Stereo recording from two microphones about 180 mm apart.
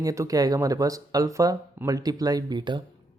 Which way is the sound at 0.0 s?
20° right (ahead or behind).